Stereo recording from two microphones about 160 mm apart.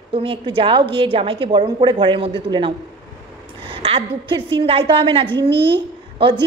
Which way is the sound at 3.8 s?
35° right (ahead or behind).